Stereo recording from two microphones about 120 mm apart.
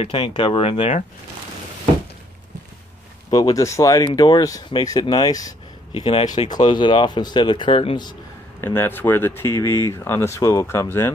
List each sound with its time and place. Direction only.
0.0 s speech: 45° left (ahead or behind)
3.3 s speech: 30° left (ahead or behind)
5.9 s speech: 50° left (ahead or behind)
6.5 s speech: 40° left (ahead or behind)
8.5 s speech: 20° left (ahead or behind)